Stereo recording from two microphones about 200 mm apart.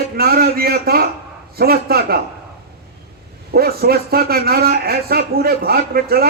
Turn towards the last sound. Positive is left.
turn(degrees=-50)  # may be behind; listen again after turning